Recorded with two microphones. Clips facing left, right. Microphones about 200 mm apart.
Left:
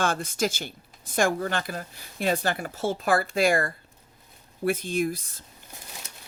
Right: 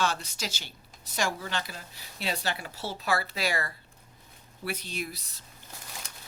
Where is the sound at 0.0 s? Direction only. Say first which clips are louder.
Left 5 dB; 50° left (ahead or behind).